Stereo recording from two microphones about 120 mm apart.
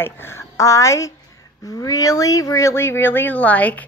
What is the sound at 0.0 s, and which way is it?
A woman's voice, 20° left (ahead or behind).